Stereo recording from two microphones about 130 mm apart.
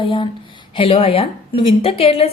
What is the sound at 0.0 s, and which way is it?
A woman's voice, 40° left (ahead or behind).